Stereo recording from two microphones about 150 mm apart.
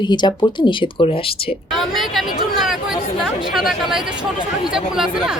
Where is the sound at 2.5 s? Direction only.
Centre (ahead or behind).